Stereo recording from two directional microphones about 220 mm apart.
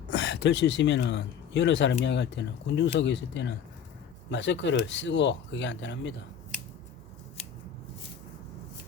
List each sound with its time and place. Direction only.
0.1 s speech: 50° left (ahead or behind)